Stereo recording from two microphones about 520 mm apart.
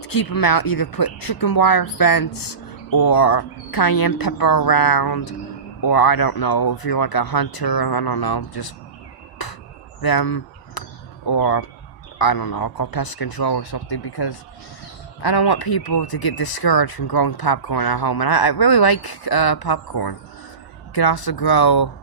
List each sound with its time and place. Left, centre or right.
0.0 s speech: left
10.0 s a sound: left
11.3 s speech: left